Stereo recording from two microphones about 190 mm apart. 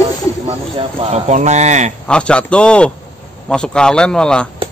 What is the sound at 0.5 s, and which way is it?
Speech, 35° right (ahead or behind).